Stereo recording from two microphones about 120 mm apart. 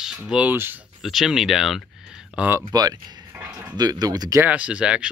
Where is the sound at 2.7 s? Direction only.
35° right (ahead or behind).